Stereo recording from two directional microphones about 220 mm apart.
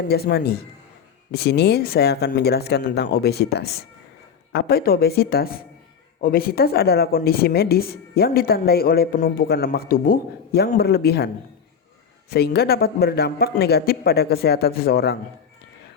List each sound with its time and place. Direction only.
0.1 s a woman's voice: 45° left (ahead or behind)
12.3 s a woman's voice: 45° left (ahead or behind)